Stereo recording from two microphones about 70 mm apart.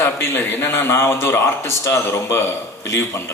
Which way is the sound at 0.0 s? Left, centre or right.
Left.